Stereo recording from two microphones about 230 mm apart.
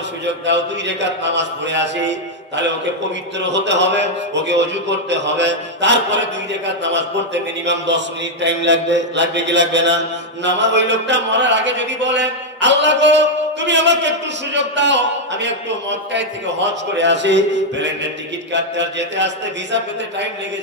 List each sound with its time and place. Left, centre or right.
0.5 s mantra: right